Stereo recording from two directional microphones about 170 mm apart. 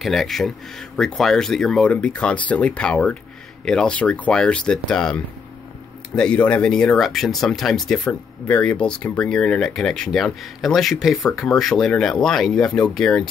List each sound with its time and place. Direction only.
0.0 s speech: centre (ahead or behind)